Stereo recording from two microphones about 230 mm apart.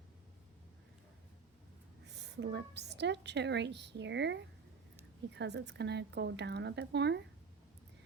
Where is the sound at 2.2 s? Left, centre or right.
Right.